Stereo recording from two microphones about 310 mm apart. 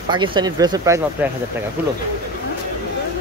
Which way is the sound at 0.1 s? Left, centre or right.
Centre.